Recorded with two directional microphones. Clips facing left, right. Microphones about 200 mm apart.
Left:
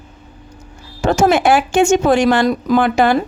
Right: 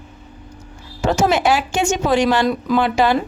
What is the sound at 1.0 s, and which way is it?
Speech, 50° left (ahead or behind).